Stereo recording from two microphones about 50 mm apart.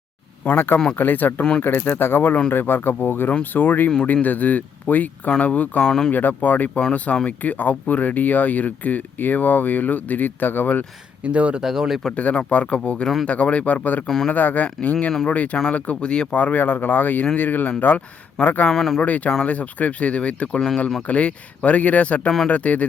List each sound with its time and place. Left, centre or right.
0.4 s speech: left
5.8 s speech: centre
6.1 s speech: left
11.2 s speech: right
11.6 s speech: centre
12.1 s speech: left
18.7 s speech: centre
19.0 s speech: left